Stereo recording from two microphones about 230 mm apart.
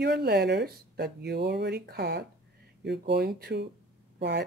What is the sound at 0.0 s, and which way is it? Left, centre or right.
Speech, right.